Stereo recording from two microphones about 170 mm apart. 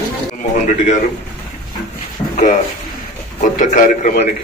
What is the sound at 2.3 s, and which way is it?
A man's voice, 50° left (ahead or behind).